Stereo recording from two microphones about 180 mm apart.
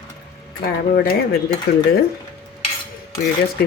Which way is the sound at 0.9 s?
55° left (ahead or behind).